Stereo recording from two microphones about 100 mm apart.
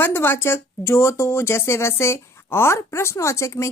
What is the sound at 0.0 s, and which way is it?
Speech, 20° left (ahead or behind).